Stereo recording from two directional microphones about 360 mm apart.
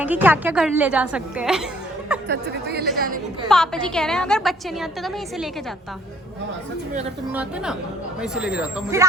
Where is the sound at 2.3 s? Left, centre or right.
Right.